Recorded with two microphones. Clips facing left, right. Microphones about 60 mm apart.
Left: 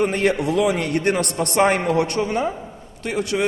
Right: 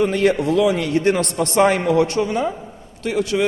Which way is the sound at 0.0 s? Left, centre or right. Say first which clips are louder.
Right 2 dB; left.